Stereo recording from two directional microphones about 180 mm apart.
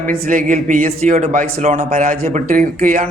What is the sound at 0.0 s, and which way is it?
A man's voice, 50° right (ahead or behind).